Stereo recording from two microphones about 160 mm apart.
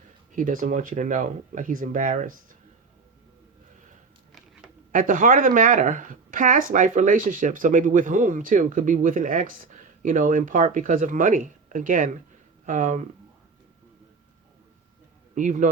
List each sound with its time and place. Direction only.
0.3 s speech: 55° right (ahead or behind)
4.9 s speech: 60° right (ahead or behind)
15.4 s speech: 50° right (ahead or behind)